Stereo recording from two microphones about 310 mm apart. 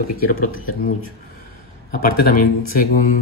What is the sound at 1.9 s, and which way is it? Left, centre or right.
Speech, left.